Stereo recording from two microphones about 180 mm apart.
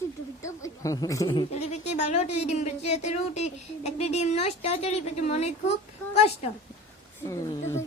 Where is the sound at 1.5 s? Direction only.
40° left (ahead or behind).